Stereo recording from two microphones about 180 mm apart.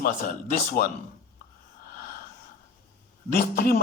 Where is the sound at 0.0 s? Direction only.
55° left (ahead or behind).